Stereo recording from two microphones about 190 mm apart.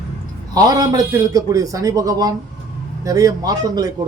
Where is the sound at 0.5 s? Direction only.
20° right (ahead or behind).